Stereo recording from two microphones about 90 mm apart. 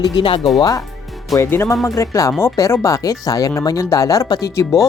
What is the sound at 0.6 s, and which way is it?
Speech, 45° left (ahead or behind).